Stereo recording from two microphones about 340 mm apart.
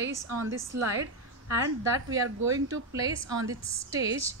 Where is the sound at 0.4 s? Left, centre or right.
Right.